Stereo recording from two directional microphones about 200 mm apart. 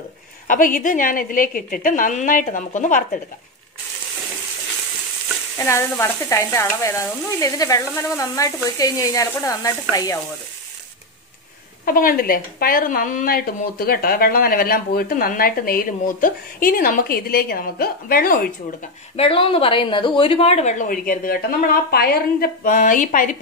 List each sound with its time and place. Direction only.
0.5 s a woman's voice: 40° left (ahead or behind)
5.6 s frying: 15° left (ahead or behind)
11.8 s speech: 45° left (ahead or behind)
19.1 s a woman's voice: 25° left (ahead or behind)